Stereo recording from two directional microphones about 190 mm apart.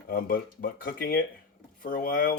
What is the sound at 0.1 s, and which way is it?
Speech, 50° left (ahead or behind).